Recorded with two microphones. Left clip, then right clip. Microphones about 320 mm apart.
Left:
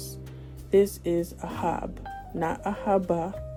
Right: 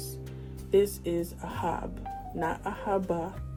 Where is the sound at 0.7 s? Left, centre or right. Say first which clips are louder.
Left 3 dB; left.